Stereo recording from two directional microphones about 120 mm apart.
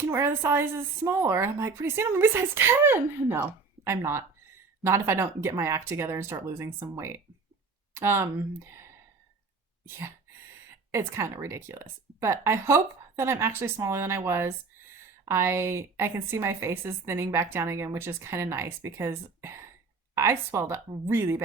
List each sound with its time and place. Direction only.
0.0 s a woman's voice: 20° right (ahead or behind)
10.9 s a woman's voice: 25° right (ahead or behind)